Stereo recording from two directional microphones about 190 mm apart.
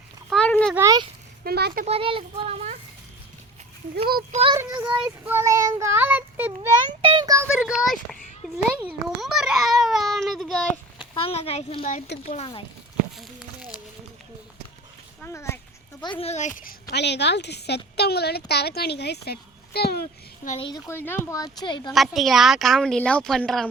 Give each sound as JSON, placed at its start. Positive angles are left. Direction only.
{"t": 0.3, "sound": "a sound", "side_deg": 5}
{"t": 1.5, "sound": "a child's voice", "side_deg": -55}
{"t": 1.8, "sound": "speech", "side_deg": -30}
{"t": 4.3, "sound": "speech", "side_deg": -30}
{"t": 4.8, "sound": "child singing", "side_deg": -5}
{"t": 7.0, "sound": "child singing", "side_deg": -25}
{"t": 7.5, "sound": "a child's voice", "side_deg": -5}
{"t": 11.1, "sound": "a child's voice", "side_deg": 30}
{"t": 15.2, "sound": "speech", "side_deg": 15}
{"t": 16.0, "sound": "a child's voice", "side_deg": 30}
{"t": 16.9, "sound": "speech", "side_deg": 65}
{"t": 20.6, "sound": "speech", "side_deg": 20}
{"t": 21.9, "sound": "a child's voice", "side_deg": 0}